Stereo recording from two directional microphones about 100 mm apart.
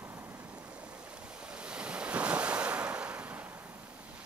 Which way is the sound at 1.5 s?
10° right (ahead or behind).